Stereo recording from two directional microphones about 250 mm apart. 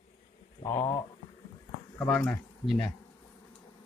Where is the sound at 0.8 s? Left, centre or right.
Left.